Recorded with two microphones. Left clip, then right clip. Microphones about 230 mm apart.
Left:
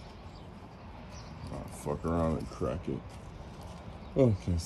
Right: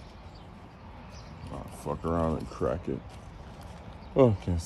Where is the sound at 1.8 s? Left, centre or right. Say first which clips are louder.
Right 2 dB; centre.